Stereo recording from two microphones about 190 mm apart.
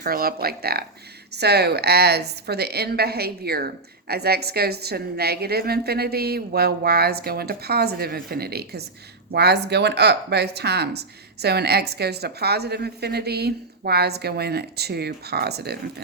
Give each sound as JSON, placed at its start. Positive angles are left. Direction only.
{"t": 0.0, "sound": "a woman's voice", "side_deg": -50}